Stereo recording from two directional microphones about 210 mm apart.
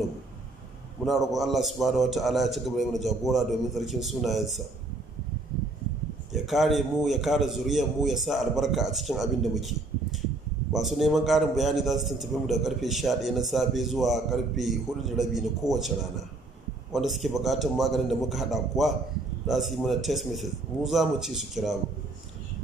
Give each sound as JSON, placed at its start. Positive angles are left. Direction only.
{"t": 1.0, "sound": "a man's voice", "side_deg": 0}
{"t": 6.3, "sound": "a man's voice", "side_deg": 0}